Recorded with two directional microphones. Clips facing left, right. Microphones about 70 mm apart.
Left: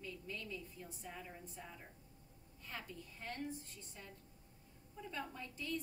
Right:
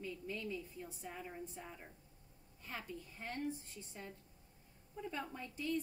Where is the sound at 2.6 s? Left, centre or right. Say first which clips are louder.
Right 2 dB; centre.